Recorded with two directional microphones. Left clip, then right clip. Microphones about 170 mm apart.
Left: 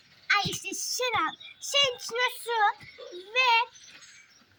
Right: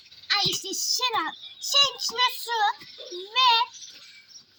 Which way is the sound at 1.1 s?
10° left (ahead or behind).